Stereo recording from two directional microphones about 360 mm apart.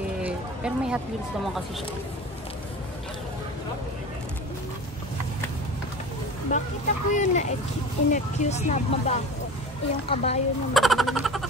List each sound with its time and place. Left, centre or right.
0.2 s speech: centre
6.5 s speech: centre
10.7 s a sound: centre